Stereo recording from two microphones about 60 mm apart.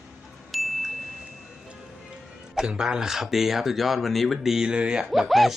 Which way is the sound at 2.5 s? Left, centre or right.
Centre.